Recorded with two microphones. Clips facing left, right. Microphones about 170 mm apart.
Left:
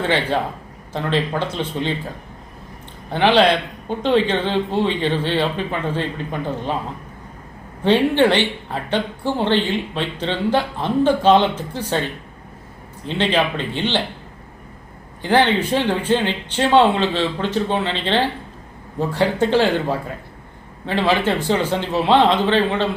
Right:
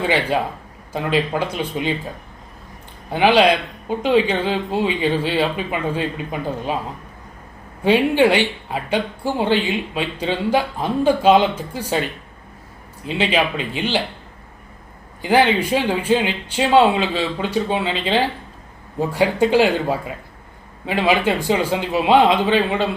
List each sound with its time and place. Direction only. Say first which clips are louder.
0.0 s speech: even; 10° right (ahead or behind)
3.1 s speech: even; 10° right (ahead or behind)
7.9 s speech: even; 10° right (ahead or behind)
13.1 s speech: even; 10° right (ahead or behind)
15.2 s speech: right 1 dB; 10° right (ahead or behind)